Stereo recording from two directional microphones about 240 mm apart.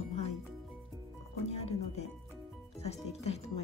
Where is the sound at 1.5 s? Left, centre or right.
Left.